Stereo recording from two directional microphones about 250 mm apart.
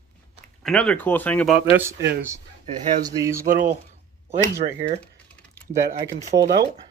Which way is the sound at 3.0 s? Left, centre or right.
Centre.